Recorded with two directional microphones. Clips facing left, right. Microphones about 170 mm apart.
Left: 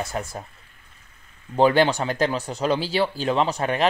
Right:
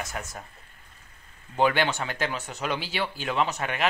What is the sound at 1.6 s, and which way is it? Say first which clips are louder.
Speech: left 6 dB; 35° left (ahead or behind).